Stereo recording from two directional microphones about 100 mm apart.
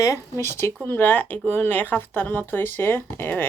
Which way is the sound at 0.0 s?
30° left (ahead or behind).